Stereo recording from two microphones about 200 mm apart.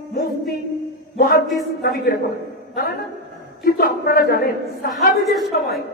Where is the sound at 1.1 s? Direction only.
50° left (ahead or behind).